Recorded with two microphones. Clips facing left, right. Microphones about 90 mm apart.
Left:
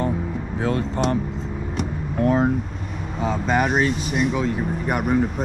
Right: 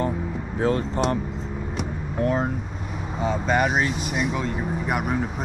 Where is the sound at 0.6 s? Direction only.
40° right (ahead or behind).